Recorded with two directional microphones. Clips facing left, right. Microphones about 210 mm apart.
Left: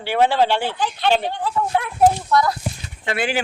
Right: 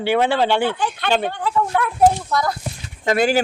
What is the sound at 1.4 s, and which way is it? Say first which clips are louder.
Speech: right 1 dB; 55° right (ahead or behind).